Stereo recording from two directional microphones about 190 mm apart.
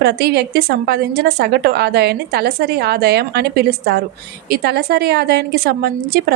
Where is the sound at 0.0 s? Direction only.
60° right (ahead or behind).